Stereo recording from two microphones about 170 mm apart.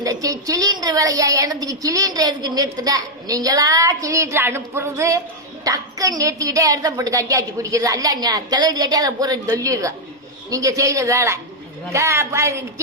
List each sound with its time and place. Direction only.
0.0 s a woman's voice: 20° right (ahead or behind)